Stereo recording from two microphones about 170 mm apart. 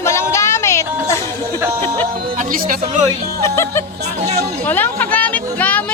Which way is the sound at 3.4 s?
15° left (ahead or behind).